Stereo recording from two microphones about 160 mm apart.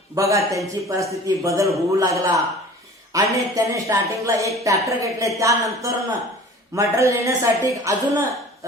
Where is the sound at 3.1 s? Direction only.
20° right (ahead or behind).